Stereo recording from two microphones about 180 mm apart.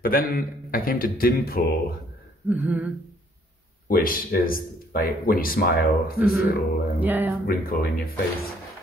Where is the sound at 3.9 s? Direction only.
50° left (ahead or behind).